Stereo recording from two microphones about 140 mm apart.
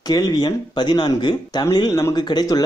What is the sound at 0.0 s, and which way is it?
Speech, 30° left (ahead or behind).